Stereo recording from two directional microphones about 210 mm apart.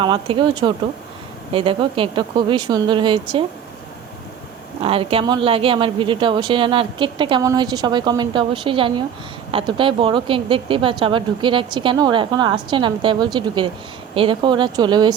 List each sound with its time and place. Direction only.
0.0 s speech: 25° right (ahead or behind)
4.8 s speech: 25° right (ahead or behind)